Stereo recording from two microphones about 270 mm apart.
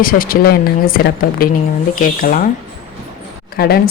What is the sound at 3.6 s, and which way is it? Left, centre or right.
Speech, left.